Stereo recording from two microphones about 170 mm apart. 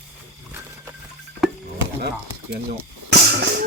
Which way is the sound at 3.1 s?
70° right (ahead or behind).